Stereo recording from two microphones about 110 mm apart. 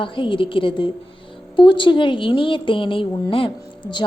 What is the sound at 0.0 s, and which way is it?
A woman's voice, 50° left (ahead or behind).